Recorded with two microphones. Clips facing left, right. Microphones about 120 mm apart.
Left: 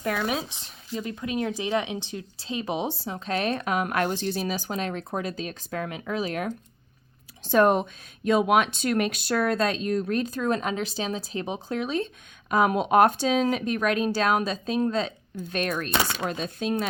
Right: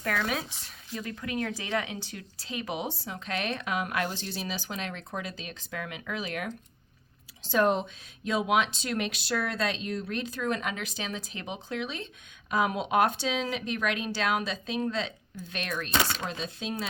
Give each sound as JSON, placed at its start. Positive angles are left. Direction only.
{"t": 0.0, "sound": "speech", "side_deg": 20}
{"t": 7.4, "sound": "speech", "side_deg": 55}